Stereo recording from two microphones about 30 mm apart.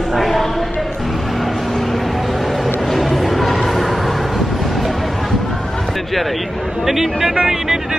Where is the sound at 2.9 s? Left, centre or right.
Centre.